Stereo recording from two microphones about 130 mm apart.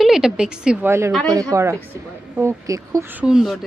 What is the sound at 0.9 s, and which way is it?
Speech, 20° right (ahead or behind).